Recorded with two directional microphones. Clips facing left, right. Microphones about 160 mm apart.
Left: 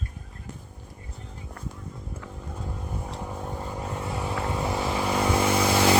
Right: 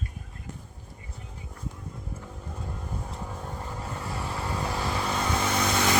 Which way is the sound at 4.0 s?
20° left (ahead or behind).